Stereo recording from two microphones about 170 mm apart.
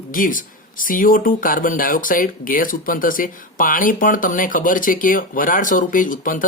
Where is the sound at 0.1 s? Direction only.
55° left (ahead or behind).